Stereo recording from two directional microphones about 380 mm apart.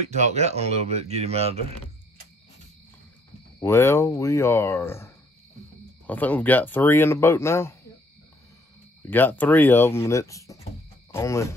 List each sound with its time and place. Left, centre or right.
0.0 s speech: centre
3.6 s speech: centre
9.0 s speech: centre